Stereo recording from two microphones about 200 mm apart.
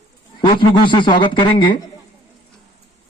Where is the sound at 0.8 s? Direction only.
25° left (ahead or behind).